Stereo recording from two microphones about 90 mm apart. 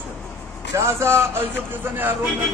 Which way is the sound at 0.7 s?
30° right (ahead or behind).